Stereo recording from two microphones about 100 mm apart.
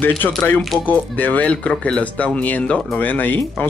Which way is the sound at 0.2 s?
15° left (ahead or behind).